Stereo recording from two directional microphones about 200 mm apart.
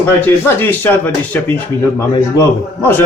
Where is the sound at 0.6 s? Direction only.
10° left (ahead or behind).